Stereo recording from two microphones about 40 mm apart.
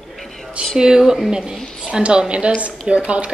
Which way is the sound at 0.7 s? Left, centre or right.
Centre.